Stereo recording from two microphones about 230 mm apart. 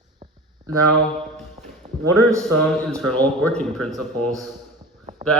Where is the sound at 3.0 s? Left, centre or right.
Centre.